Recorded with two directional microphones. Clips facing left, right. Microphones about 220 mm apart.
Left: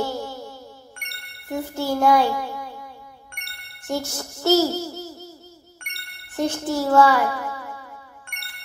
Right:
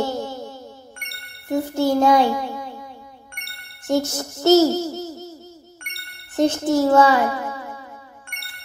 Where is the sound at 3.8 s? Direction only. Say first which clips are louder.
Right 6 dB; 20° right (ahead or behind).